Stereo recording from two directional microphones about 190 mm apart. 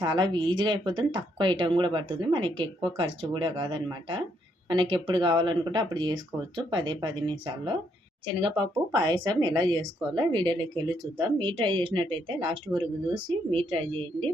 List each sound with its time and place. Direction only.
0.0 s speech: 25° right (ahead or behind)